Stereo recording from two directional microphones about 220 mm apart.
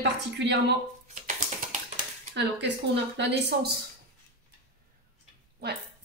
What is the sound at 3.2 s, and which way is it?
Speech, 50° right (ahead or behind).